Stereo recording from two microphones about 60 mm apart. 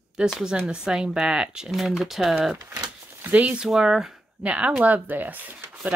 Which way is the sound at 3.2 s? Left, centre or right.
Right.